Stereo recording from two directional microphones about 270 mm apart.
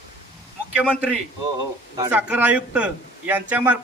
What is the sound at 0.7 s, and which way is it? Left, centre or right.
A man's voice, centre.